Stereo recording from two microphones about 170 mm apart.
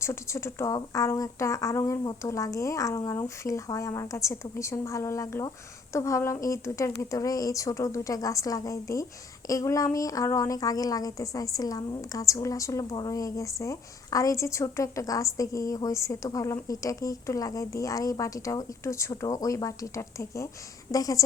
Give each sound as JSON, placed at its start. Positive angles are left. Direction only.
{"t": 0.0, "sound": "a woman's voice", "side_deg": 15}